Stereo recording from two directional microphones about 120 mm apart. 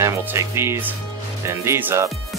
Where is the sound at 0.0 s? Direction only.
20° right (ahead or behind).